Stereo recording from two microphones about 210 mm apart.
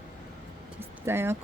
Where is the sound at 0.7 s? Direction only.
10° right (ahead or behind).